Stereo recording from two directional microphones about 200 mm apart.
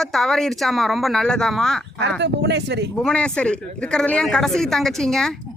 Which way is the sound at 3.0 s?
5° left (ahead or behind).